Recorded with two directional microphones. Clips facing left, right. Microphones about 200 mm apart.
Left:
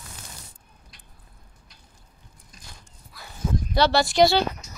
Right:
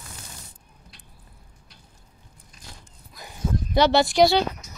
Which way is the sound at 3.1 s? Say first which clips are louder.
Even; 15° right (ahead or behind).